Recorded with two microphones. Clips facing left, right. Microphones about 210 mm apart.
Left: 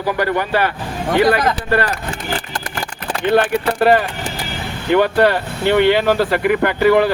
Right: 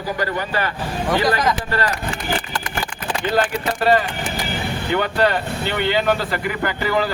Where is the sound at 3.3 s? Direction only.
60° left (ahead or behind).